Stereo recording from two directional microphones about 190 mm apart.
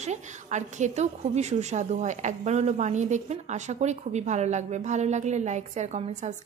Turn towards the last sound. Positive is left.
turn(degrees=-40)  # may be behind; listen again after turning